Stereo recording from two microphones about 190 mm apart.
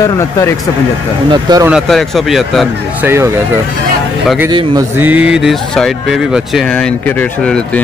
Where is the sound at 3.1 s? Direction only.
15° right (ahead or behind).